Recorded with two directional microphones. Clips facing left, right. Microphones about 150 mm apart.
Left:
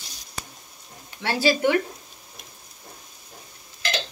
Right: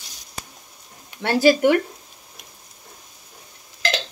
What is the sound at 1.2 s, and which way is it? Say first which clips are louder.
Speech: right 6 dB; 50° right (ahead or behind).